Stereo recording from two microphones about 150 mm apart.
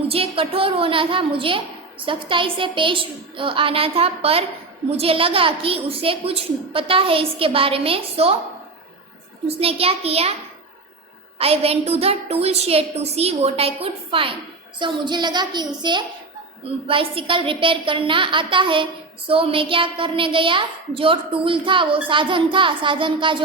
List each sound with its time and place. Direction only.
0.1 s a woman's voice: 40° right (ahead or behind)
9.5 s a woman's voice: 40° right (ahead or behind)
11.3 s a woman's voice: 40° right (ahead or behind)